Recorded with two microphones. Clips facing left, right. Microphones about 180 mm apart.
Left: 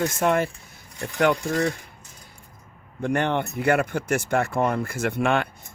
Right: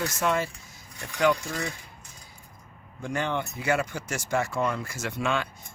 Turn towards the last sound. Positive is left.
turn(degrees=60)  # may be behind; listen again after turning